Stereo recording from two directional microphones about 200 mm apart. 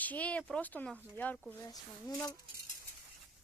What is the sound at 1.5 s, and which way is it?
Speech, 20° left (ahead or behind).